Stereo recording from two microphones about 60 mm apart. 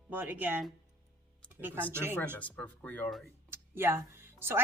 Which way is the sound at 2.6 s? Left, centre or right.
Left.